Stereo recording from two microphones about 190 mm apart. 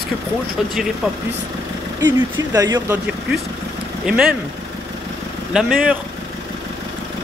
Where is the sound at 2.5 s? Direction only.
20° right (ahead or behind).